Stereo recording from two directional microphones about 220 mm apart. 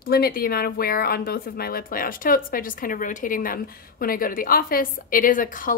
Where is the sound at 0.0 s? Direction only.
45° left (ahead or behind).